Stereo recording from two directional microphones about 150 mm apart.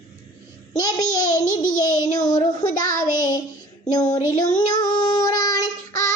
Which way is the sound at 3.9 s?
25° left (ahead or behind).